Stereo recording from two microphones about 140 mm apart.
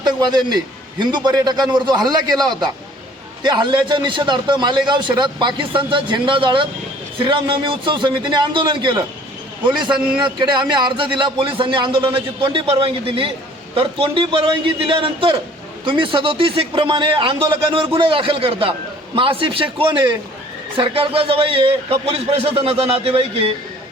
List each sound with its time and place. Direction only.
0.0 s a man's voice: 30° right (ahead or behind)
9.9 s a man's voice: 5° right (ahead or behind)
10.2 s a man's voice: 35° right (ahead or behind)